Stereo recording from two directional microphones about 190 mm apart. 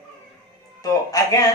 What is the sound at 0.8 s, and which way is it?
Speech, 20° left (ahead or behind).